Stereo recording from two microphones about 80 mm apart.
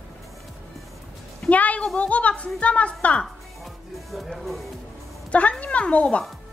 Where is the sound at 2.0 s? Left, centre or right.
Centre.